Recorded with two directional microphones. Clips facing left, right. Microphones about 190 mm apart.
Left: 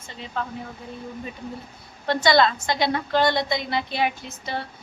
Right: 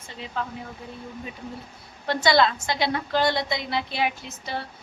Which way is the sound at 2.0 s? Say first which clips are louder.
Left 2 dB; 5° right (ahead or behind).